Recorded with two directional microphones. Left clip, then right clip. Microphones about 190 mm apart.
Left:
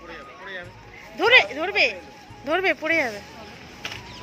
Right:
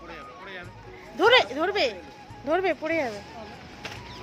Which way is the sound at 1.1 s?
25° right (ahead or behind).